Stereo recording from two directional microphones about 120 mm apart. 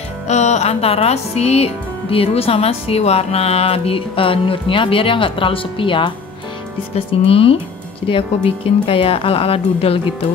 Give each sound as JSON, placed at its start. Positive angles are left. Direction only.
{"t": 0.3, "sound": "music", "side_deg": 75}
{"t": 7.0, "sound": "speech", "side_deg": 50}